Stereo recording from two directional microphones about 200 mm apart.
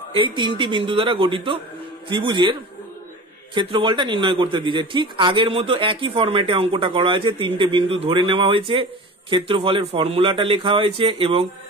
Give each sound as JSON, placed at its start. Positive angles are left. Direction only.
{"t": 0.1, "sound": "a man's voice", "side_deg": -25}
{"t": 3.5, "sound": "a man's voice", "side_deg": -25}